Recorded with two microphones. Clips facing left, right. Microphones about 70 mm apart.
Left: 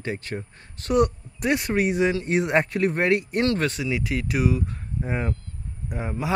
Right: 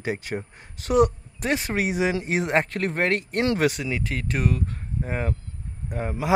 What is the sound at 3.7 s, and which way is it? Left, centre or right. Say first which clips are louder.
Speech: left 2 dB; centre.